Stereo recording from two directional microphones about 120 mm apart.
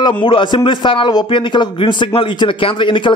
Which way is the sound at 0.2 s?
45° left (ahead or behind).